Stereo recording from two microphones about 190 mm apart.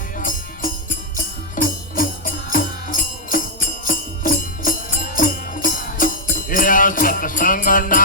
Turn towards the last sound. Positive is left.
turn(degrees=45)  # may be behind; listen again after turning